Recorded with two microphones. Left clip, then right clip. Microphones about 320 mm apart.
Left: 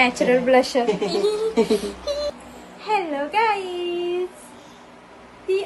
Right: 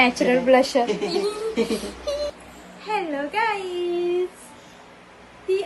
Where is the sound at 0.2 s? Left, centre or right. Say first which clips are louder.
Left 1 dB; centre.